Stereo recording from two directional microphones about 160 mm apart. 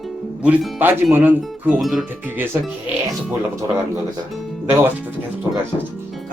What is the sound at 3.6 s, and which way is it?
Speech, 20° right (ahead or behind).